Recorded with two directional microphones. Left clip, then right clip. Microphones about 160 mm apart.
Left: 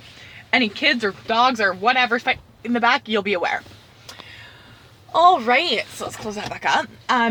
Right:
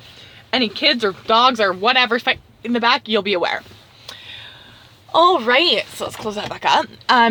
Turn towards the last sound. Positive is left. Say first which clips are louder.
# right 5 dB
turn(degrees=-35)  # may be behind; listen again after turning